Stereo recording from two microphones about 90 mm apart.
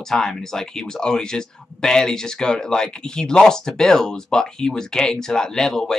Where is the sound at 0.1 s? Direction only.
5° left (ahead or behind).